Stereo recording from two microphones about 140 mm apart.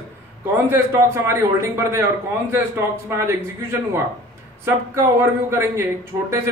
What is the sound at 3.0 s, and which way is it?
Speech, 20° right (ahead or behind).